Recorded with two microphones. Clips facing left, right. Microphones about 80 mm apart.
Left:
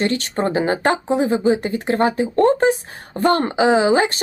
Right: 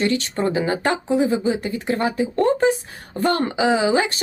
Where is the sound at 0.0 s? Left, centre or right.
Left.